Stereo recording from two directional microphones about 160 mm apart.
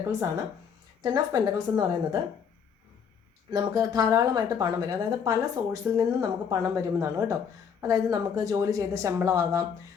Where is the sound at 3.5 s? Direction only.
25° right (ahead or behind).